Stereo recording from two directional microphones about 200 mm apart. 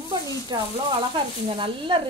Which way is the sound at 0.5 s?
20° right (ahead or behind).